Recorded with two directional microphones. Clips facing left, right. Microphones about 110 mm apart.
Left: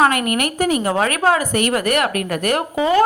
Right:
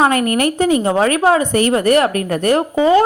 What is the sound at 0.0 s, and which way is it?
A woman's voice, 35° right (ahead or behind).